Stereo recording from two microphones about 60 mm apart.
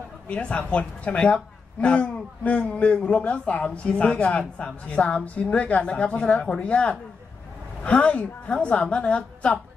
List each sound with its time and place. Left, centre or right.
0.3 s a woman's voice: centre